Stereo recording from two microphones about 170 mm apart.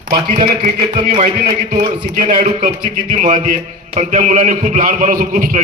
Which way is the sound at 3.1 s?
45° right (ahead or behind).